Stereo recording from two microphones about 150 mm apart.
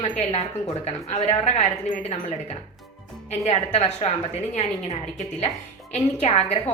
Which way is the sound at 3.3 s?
45° left (ahead or behind).